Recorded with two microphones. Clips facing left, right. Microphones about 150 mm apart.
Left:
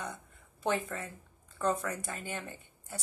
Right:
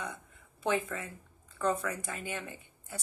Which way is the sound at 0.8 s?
40° left (ahead or behind).